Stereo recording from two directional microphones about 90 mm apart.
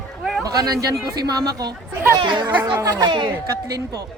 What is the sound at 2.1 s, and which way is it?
Speech, 60° right (ahead or behind).